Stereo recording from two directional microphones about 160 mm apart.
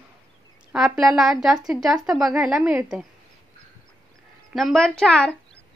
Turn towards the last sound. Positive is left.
turn(degrees=5)  # may be behind; listen again after turning